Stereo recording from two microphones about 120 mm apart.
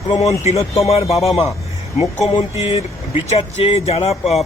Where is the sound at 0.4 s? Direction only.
65° left (ahead or behind).